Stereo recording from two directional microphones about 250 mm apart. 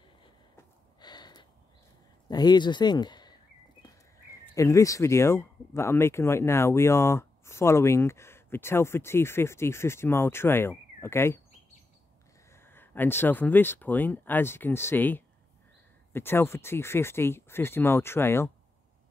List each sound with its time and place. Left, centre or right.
1.0 s a sound: centre
2.2 s speech: centre
12.5 s speech: centre